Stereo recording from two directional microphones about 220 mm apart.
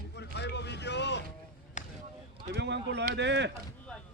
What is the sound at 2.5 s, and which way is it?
Speech, 50° right (ahead or behind).